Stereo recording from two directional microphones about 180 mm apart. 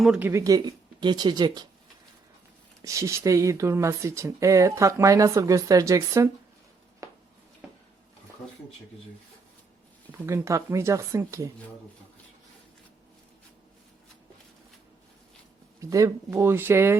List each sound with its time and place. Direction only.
0.0 s speech: 5° right (ahead or behind); by 1.6 s 25° right (ahead or behind)
2.8 s speech: 15° right (ahead or behind)
7.0 s a sound: 15° right (ahead or behind)
10.1 s speech: 15° right (ahead or behind)
15.8 s speech: 15° right (ahead or behind)